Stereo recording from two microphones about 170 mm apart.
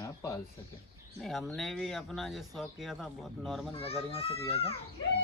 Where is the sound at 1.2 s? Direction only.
Centre (ahead or behind).